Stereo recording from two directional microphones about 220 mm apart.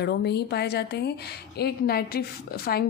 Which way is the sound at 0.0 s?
50° left (ahead or behind).